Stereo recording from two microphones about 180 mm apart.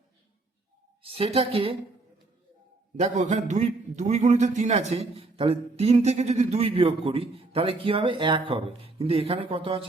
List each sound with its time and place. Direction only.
1.0 s a man's voice: 30° right (ahead or behind)
3.0 s a man's voice: 40° right (ahead or behind)